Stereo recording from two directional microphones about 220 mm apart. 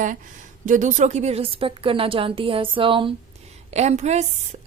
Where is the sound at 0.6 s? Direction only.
35° right (ahead or behind).